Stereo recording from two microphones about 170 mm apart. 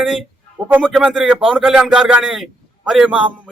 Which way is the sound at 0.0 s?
Centre (ahead or behind).